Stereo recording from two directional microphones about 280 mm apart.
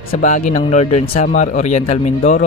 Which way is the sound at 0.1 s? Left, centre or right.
Left.